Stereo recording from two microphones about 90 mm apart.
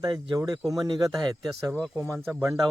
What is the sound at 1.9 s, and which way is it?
Speech, 25° right (ahead or behind).